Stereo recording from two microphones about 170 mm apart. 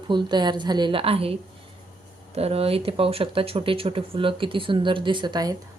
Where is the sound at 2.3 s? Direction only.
35° right (ahead or behind).